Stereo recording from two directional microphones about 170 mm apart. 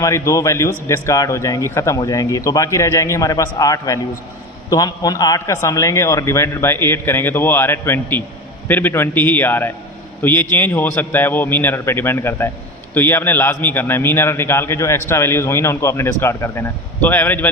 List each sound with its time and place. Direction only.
0.0 s a man's voice: 20° left (ahead or behind)